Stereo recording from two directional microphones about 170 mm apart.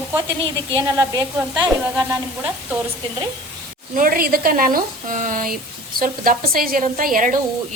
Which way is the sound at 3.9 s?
55° right (ahead or behind).